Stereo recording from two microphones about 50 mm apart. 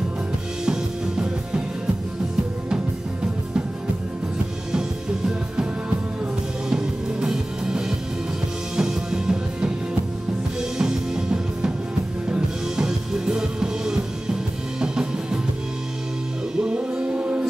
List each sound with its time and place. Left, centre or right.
0.7 s music: centre
4.7 s music: centre
6.7 s music: centre
16.5 s music: centre